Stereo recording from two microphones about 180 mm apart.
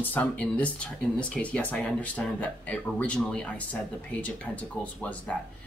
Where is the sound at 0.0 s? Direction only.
10° left (ahead or behind).